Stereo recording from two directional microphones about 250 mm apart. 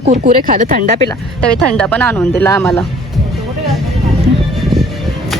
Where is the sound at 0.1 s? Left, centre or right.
Right.